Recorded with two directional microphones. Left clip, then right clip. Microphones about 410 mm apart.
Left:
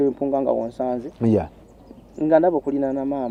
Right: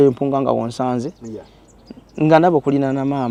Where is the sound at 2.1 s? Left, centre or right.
Right.